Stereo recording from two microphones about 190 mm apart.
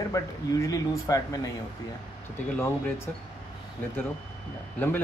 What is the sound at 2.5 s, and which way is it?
Speech, 10° left (ahead or behind).